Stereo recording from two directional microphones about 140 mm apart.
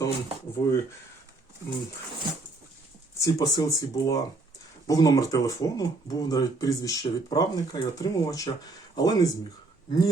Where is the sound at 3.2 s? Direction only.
25° left (ahead or behind).